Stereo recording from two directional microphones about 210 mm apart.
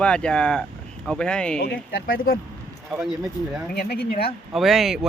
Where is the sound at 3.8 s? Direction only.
45° left (ahead or behind).